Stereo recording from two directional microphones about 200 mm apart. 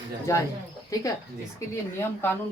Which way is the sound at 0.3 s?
15° left (ahead or behind).